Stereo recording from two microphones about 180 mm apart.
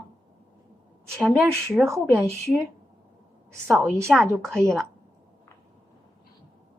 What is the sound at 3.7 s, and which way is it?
Speech, 15° right (ahead or behind).